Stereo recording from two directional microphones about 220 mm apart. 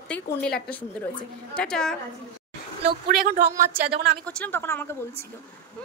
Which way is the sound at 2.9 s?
40° right (ahead or behind).